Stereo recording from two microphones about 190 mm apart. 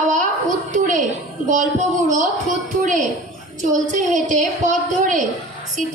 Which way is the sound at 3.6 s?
40° right (ahead or behind).